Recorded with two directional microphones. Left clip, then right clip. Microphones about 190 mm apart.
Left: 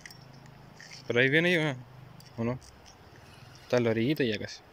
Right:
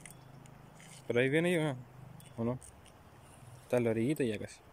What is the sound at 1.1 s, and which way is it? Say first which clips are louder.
Speech: left 6 dB; 5° right (ahead or behind).